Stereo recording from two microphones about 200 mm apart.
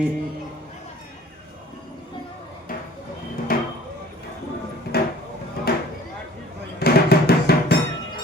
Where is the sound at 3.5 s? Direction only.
45° left (ahead or behind).